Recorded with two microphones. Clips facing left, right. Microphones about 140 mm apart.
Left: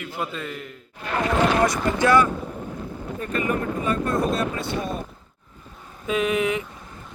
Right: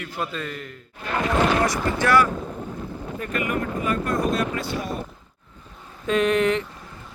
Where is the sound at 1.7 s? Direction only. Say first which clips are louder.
Left 1 dB; 20° left (ahead or behind).